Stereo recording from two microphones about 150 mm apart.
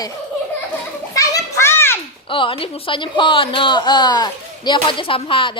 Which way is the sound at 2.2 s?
35° left (ahead or behind).